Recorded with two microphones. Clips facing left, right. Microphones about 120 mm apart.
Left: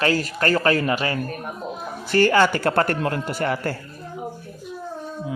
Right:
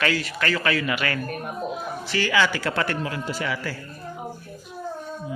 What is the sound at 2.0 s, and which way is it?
A man's voice, 50° left (ahead or behind).